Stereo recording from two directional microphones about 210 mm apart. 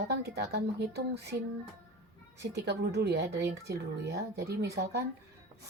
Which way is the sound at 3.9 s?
50° right (ahead or behind).